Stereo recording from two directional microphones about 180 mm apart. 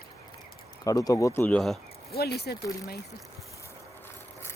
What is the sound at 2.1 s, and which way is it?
Speech, 60° left (ahead or behind).